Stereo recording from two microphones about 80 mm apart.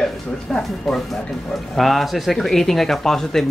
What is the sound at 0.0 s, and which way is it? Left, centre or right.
Speech, centre.